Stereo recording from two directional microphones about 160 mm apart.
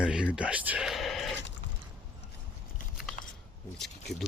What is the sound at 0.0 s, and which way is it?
Speech, 5° right (ahead or behind).